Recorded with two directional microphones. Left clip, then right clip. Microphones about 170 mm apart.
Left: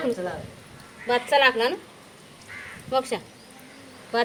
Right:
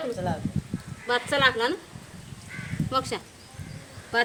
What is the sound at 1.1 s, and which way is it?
Speech, 30° right (ahead or behind).